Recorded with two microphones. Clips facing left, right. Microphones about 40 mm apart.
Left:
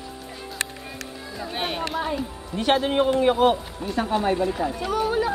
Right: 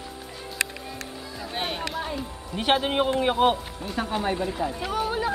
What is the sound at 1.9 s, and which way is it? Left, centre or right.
Music, centre.